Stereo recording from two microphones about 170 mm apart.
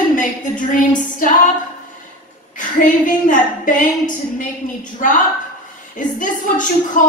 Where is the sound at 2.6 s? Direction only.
50° left (ahead or behind).